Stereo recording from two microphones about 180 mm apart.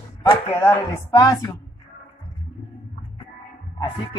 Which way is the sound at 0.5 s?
20° left (ahead or behind).